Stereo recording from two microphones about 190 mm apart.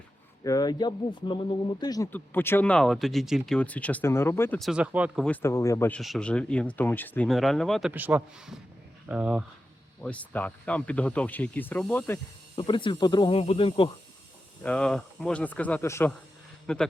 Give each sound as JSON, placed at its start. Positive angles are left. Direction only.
{"t": 0.4, "sound": "speech", "side_deg": 20}
{"t": 4.6, "sound": "speech", "side_deg": -5}
{"t": 5.2, "sound": "speech", "side_deg": 10}
{"t": 6.0, "sound": "speech", "side_deg": 0}
{"t": 10.0, "sound": "speech", "side_deg": 5}
{"t": 12.5, "sound": "speech", "side_deg": 25}
{"t": 14.6, "sound": "speech", "side_deg": 5}